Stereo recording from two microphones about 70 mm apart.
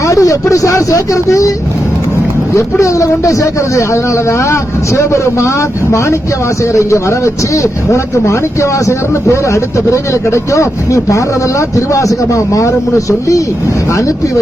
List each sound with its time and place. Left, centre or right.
0.1 s speech: left
2.6 s speech: left
4.9 s speech: left
7.5 s speech: left